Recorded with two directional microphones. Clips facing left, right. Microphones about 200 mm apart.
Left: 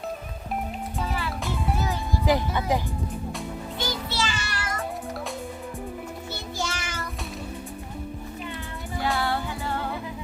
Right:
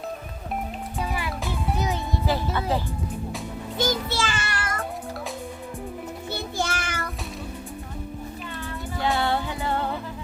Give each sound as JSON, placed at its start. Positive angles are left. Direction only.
{"t": 0.9, "sound": "music", "side_deg": -15}
{"t": 2.2, "sound": "speech", "side_deg": 15}
{"t": 3.8, "sound": "music", "side_deg": -45}
{"t": 6.6, "sound": "child singing", "side_deg": -55}
{"t": 9.1, "sound": "music", "side_deg": -20}